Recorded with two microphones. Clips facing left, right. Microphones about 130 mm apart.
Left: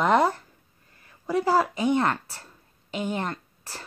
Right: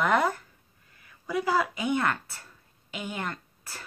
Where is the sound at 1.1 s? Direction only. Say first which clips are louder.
Left 4 dB; 40° left (ahead or behind).